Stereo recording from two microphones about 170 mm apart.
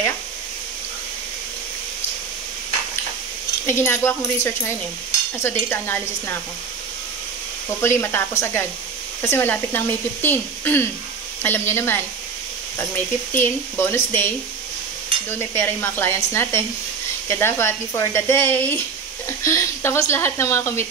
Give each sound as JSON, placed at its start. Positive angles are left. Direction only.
{"t": 3.6, "sound": "speech", "side_deg": 15}
{"t": 7.8, "sound": "speech", "side_deg": 15}